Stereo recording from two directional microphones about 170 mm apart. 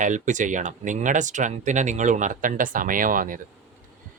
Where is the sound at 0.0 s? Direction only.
45° right (ahead or behind).